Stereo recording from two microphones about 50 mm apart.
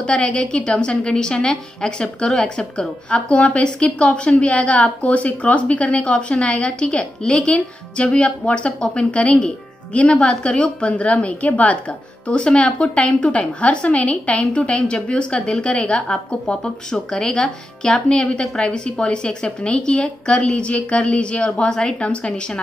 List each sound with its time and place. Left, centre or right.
0.0 s a woman's voice: left
12.3 s a woman's voice: centre
16.9 s a woman's voice: centre